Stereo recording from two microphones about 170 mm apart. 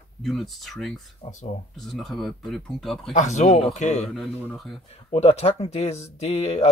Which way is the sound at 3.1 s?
45° left (ahead or behind).